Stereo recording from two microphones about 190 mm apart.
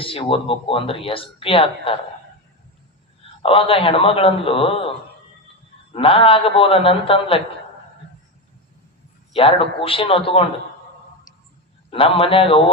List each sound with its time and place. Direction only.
0.0 s speech: 30° left (ahead or behind)
3.4 s speech: 30° left (ahead or behind)
5.9 s speech: 30° left (ahead or behind)
9.3 s speech: 30° left (ahead or behind)
11.9 s speech: 30° left (ahead or behind)